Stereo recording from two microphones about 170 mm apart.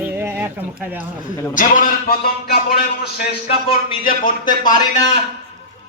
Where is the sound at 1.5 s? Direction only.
50° left (ahead or behind).